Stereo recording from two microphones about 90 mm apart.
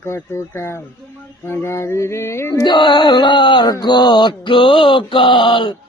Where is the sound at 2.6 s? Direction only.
60° left (ahead or behind).